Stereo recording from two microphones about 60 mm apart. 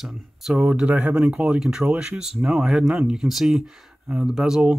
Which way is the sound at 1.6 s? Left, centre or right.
Centre.